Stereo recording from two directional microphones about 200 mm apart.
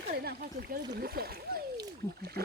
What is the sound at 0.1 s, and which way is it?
Speech, 50° right (ahead or behind).